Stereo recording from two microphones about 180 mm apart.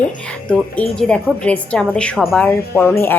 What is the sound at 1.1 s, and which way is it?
A woman's voice, 5° left (ahead or behind).